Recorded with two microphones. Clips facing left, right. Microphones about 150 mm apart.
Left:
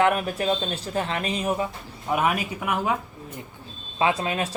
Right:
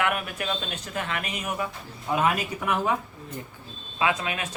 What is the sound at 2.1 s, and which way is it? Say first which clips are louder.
Speech: left 1 dB; 10° left (ahead or behind).